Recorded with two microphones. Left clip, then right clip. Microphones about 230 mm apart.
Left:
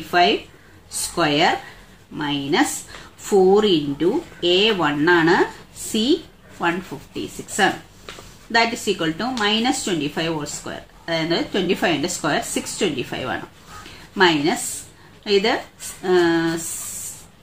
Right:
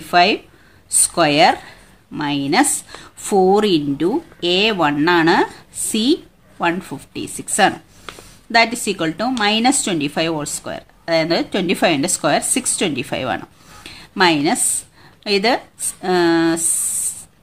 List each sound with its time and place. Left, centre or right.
0.1 s speech: right